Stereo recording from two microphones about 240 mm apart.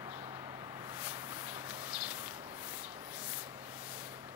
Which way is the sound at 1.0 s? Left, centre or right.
Centre.